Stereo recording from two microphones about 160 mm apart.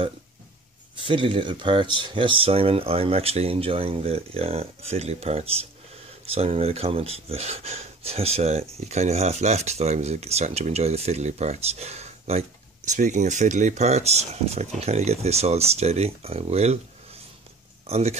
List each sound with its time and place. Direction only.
0.9 s speech: 30° right (ahead or behind)
17.8 s speech: 40° right (ahead or behind)